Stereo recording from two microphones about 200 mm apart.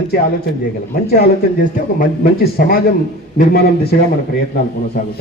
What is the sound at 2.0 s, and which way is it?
Speech, 45° left (ahead or behind).